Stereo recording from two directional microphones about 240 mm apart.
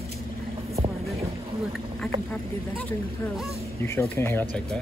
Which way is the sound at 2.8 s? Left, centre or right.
Centre.